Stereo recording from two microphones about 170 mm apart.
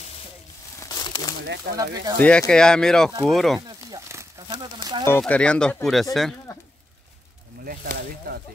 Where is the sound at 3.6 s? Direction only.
20° right (ahead or behind).